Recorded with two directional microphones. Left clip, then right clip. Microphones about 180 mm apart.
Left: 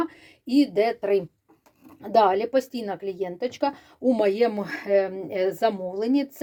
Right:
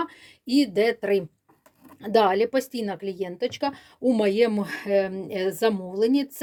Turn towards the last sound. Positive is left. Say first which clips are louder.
# right 2 dB
turn(degrees=-30)  # may be behind; listen again after turning